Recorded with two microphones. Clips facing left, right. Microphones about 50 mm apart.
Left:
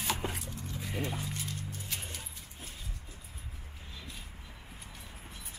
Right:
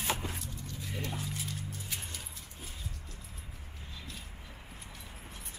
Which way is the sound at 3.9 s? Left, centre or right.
Centre.